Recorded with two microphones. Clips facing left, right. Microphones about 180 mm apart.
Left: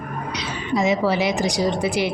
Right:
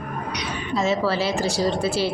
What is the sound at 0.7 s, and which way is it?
Speech, 15° left (ahead or behind).